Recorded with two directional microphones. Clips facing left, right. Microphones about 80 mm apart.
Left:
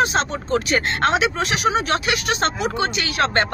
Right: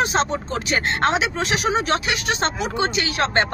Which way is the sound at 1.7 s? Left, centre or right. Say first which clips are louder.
Left 1 dB; right.